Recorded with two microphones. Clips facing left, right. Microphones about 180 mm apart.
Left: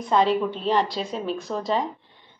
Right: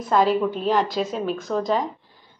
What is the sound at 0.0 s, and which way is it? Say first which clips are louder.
A woman's voice: right 1 dB; 5° right (ahead or behind).